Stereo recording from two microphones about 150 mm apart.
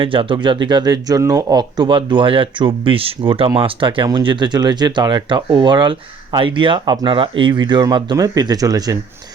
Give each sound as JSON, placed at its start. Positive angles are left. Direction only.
{"t": 0.0, "sound": "speech", "side_deg": -35}